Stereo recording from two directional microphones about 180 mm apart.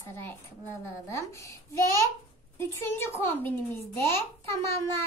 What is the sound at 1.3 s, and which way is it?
A child's voice, 15° left (ahead or behind).